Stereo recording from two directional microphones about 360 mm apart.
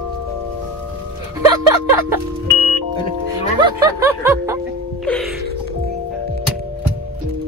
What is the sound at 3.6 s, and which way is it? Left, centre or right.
Music, centre.